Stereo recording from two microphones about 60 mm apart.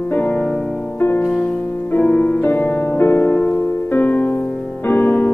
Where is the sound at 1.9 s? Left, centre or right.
Left.